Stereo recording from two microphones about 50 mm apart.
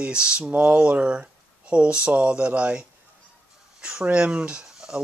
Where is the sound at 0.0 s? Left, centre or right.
Centre.